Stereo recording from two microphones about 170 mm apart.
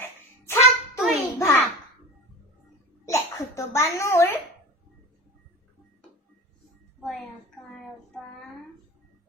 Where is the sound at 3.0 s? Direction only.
15° left (ahead or behind).